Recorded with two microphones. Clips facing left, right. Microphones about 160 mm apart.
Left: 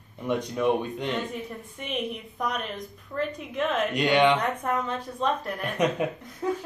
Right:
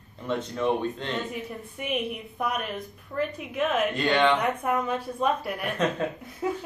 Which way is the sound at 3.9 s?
15° left (ahead or behind).